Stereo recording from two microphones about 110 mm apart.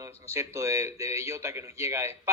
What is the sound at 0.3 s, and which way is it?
Speech, 25° right (ahead or behind).